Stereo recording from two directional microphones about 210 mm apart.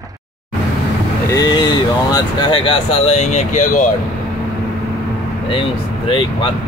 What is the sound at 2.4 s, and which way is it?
Speech, 25° left (ahead or behind).